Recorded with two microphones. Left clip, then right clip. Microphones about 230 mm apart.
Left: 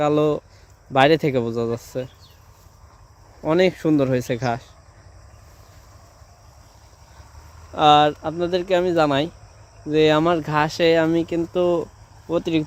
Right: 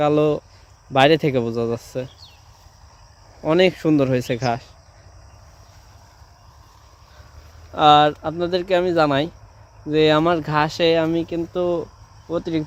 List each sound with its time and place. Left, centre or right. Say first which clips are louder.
0.0 s speech: right 1 dB; centre
3.4 s speech: right 2 dB; centre
7.7 s speech: right 1 dB; centre